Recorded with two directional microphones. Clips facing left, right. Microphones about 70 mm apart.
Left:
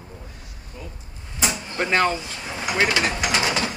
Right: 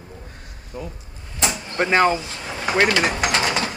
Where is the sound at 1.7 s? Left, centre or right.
Centre.